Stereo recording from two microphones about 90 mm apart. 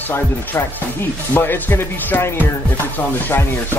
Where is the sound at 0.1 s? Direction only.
25° left (ahead or behind).